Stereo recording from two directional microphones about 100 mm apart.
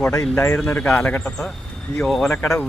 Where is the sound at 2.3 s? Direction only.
20° left (ahead or behind).